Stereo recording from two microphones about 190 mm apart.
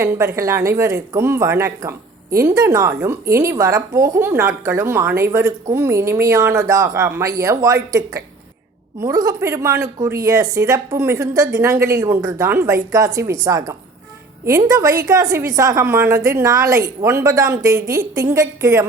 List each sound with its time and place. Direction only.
0.0 s a woman's voice: 15° right (ahead or behind)